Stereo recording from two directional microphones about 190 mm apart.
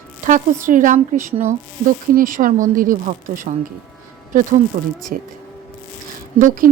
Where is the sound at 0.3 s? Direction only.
40° right (ahead or behind).